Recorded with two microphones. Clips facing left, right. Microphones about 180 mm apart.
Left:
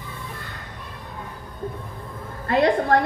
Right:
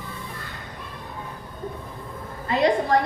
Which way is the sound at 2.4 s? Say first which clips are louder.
Left 2 dB; 55° left (ahead or behind).